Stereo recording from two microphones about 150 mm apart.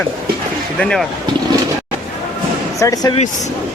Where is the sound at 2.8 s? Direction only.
25° left (ahead or behind).